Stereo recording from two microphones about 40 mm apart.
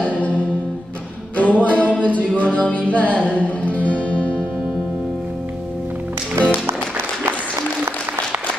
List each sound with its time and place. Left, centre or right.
0.0 s music: left
2.0 s a capella: left
2.3 s music: left